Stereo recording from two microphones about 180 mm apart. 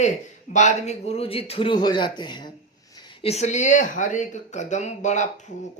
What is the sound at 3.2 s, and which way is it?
Speech, 35° left (ahead or behind).